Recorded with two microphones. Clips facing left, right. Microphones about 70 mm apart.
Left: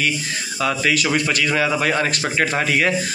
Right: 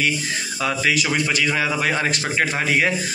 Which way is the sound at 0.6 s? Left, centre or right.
Centre.